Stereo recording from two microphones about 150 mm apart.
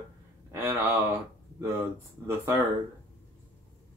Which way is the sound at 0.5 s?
15° right (ahead or behind).